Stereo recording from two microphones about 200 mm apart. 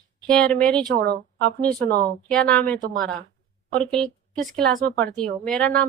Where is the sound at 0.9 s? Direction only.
50° right (ahead or behind).